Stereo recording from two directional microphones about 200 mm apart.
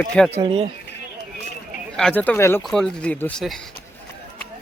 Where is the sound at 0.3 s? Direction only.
25° right (ahead or behind).